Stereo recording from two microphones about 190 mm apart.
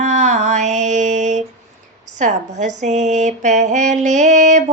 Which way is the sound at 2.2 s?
40° right (ahead or behind).